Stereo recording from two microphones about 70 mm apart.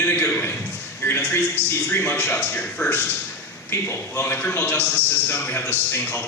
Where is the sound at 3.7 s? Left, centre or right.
Left.